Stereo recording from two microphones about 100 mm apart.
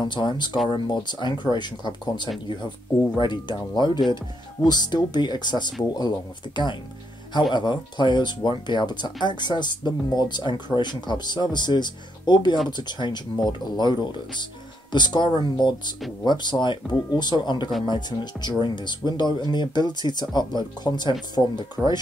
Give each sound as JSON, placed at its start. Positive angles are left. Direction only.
{"t": 0.0, "sound": "speech", "side_deg": 50}